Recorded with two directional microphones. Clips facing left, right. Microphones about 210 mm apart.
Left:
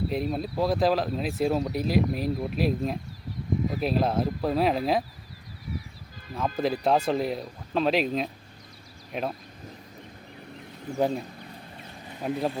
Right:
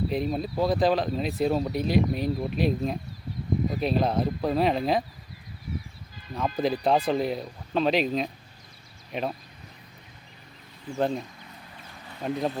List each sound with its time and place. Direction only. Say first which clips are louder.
0.1 s speech: right 1 dB; centre (ahead or behind)
6.3 s speech: right 1 dB; centre (ahead or behind)
10.9 s speech: left 1 dB; 10° left (ahead or behind)
11.4 s a sound: left 4 dB; 30° left (ahead or behind)
12.2 s speech: even; 5° left (ahead or behind)